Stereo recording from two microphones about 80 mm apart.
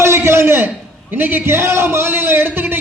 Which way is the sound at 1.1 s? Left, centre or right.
Right.